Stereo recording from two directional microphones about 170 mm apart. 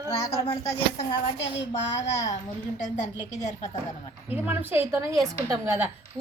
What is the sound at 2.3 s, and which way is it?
A woman's voice, 45° left (ahead or behind).